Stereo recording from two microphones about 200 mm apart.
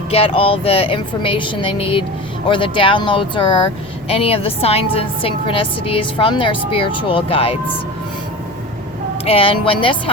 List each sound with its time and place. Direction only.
0.1 s a woman's voice: 30° left (ahead or behind)
9.2 s a woman's voice: 30° left (ahead or behind)